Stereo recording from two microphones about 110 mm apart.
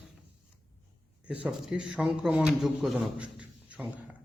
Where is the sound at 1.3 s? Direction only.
5° right (ahead or behind).